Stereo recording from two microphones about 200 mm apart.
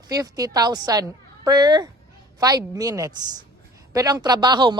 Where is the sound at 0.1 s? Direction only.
20° right (ahead or behind).